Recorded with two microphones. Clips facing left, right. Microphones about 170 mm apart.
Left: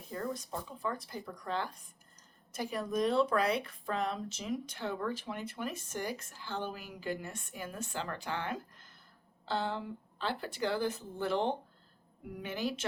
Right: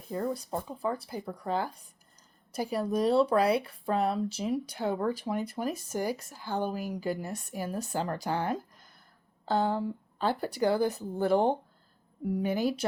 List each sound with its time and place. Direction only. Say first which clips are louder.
0.1 s speech: right 6 dB; 30° right (ahead or behind)